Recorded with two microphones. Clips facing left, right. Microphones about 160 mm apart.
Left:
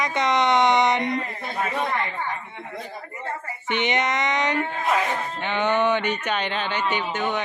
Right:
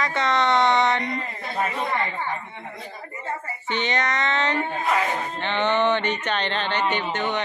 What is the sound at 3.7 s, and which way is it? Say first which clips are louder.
Speech: left 2 dB; 20° left (ahead or behind).